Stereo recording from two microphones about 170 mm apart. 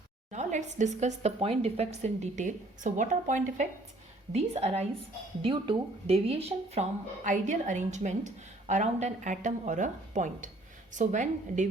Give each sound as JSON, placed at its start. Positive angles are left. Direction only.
{"t": 0.3, "sound": "a woman's voice", "side_deg": -45}